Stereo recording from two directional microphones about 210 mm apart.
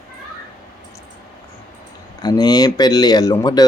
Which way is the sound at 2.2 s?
20° left (ahead or behind).